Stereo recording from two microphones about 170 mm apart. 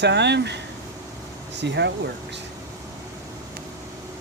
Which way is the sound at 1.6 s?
90° right.